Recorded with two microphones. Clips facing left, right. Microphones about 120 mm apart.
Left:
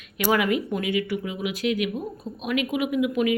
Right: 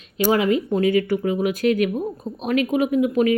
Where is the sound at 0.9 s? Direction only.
45° right (ahead or behind).